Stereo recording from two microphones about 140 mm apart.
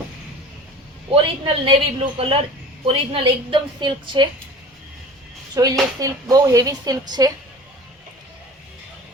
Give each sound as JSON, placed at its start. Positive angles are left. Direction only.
{"t": 1.1, "sound": "a woman's voice", "side_deg": -40}
{"t": 5.6, "sound": "a woman's voice", "side_deg": -25}